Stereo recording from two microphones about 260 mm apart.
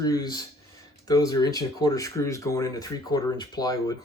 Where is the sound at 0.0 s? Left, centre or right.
Centre.